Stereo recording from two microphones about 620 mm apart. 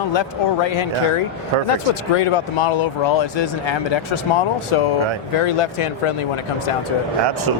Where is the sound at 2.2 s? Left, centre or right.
Left.